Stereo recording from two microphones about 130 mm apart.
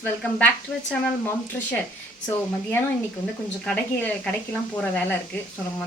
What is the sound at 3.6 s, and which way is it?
A woman's voice, 10° left (ahead or behind).